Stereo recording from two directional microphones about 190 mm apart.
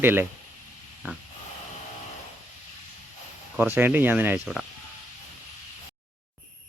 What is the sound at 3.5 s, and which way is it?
Speech, 10° right (ahead or behind).